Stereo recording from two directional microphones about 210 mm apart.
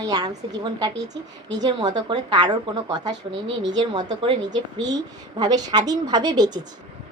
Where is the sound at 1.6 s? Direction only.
20° right (ahead or behind).